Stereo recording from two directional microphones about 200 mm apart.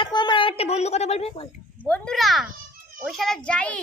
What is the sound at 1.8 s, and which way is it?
A child's voice, 5° left (ahead or behind).